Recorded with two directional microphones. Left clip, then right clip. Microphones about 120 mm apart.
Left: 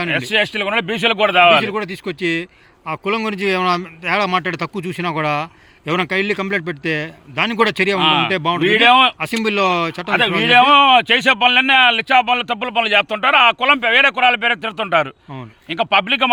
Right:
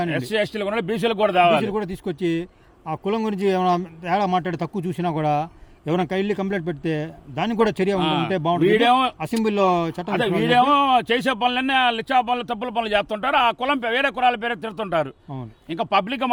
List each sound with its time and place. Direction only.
0.1 s a man's voice: 20° left (ahead or behind)
1.6 s speech: 35° right (ahead or behind)
7.9 s speech: 15° left (ahead or behind)
8.3 s speech: 25° right (ahead or behind)
8.6 s a man's voice: 20° left (ahead or behind)
9.1 s speech: 25° right (ahead or behind)
10.1 s a man's voice: 15° left (ahead or behind)